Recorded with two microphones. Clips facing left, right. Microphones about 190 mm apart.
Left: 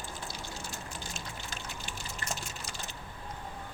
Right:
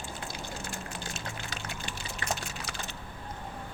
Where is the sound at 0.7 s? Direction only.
70° right (ahead or behind).